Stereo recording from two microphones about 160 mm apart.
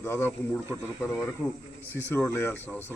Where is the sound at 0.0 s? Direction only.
15° left (ahead or behind).